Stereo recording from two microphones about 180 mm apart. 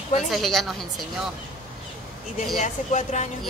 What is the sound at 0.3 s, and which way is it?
Speech, centre (ahead or behind).